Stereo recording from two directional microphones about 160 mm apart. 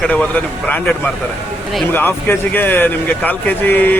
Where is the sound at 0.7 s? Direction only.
10° left (ahead or behind).